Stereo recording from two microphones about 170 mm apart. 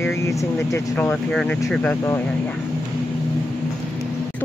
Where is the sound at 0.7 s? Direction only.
15° left (ahead or behind).